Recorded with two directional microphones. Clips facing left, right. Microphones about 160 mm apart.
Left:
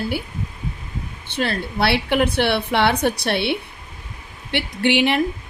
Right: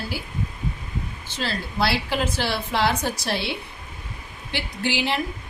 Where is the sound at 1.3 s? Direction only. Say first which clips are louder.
Left 6 dB; 60° left (ahead or behind).